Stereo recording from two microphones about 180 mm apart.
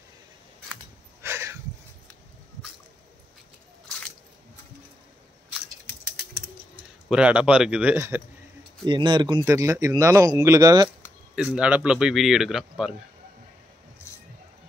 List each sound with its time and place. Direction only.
1.2 s a sound: 15° right (ahead or behind)
7.1 s speech: 5° right (ahead or behind)
8.8 s speech: 25° right (ahead or behind)
11.3 s speech: 5° right (ahead or behind)